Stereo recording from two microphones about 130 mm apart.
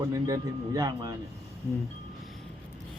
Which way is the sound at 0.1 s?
25° right (ahead or behind).